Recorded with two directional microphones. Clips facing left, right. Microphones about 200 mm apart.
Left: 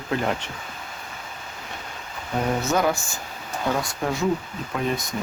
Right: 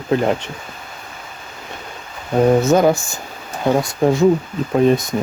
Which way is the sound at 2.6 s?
20° right (ahead or behind).